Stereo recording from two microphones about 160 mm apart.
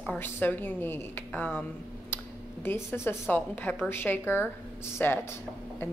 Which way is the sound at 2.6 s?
15° left (ahead or behind).